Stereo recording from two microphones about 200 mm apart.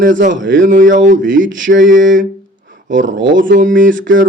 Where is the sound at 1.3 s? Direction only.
70° right (ahead or behind).